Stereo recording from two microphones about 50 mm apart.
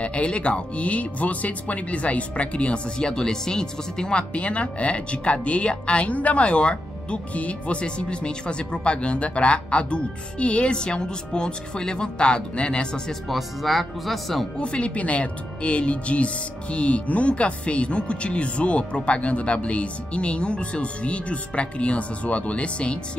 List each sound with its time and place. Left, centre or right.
0.0 s speech: left
13.3 s speech: centre
14.6 s speech: left